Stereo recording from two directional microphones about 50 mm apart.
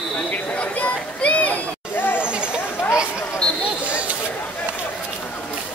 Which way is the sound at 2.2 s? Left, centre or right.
Right.